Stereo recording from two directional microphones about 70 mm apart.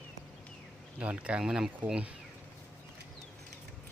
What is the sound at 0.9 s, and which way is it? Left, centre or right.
Speech, centre.